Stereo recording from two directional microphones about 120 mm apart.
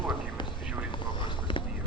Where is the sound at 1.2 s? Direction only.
45° left (ahead or behind).